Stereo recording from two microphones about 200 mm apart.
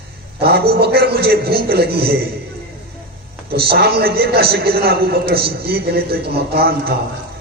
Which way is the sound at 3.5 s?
50° right (ahead or behind).